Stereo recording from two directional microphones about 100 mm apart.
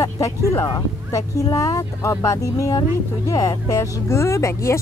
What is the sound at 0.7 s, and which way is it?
Speech, 35° left (ahead or behind).